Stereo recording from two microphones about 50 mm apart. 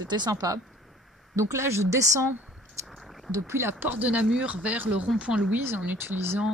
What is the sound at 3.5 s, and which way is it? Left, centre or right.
Speech, right.